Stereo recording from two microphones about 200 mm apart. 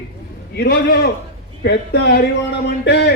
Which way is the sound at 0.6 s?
50° left (ahead or behind).